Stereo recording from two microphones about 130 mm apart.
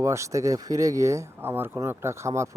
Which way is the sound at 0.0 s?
25° right (ahead or behind).